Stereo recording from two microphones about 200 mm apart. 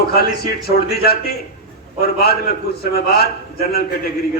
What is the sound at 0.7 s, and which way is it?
A man's voice, 50° left (ahead or behind).